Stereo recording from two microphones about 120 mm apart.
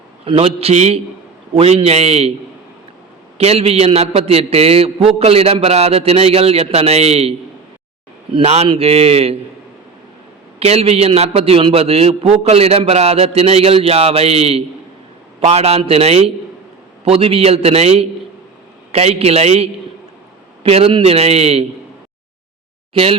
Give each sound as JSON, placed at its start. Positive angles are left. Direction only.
{"t": 0.3, "sound": "a man's voice", "side_deg": -55}
{"t": 3.3, "sound": "a man's voice", "side_deg": -60}
{"t": 10.6, "sound": "a man's voice", "side_deg": -60}